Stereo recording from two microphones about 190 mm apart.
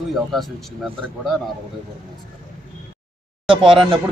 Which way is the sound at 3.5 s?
25° right (ahead or behind).